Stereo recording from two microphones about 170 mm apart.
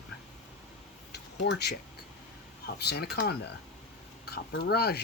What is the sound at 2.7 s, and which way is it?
Speech, 70° left (ahead or behind).